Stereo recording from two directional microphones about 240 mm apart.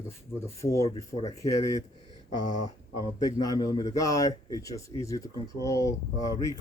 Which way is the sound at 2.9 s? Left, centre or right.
Centre.